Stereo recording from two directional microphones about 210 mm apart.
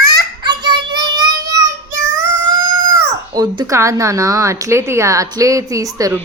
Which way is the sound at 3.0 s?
20° right (ahead or behind).